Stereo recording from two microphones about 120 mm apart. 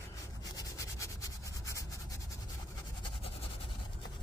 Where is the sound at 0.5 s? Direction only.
25° left (ahead or behind).